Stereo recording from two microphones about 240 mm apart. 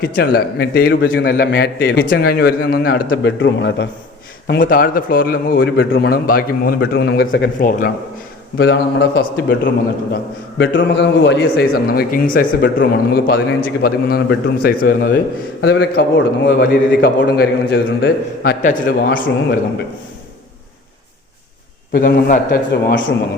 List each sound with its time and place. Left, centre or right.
0.0 s a man's voice: left
21.9 s a man's voice: left